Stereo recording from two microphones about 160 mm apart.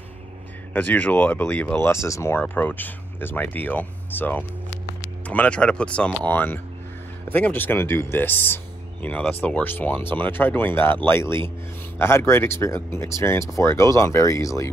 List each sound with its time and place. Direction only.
0.7 s speech: 10° left (ahead or behind)